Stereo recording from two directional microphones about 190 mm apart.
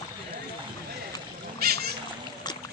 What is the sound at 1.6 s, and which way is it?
Cat, 55° right (ahead or behind).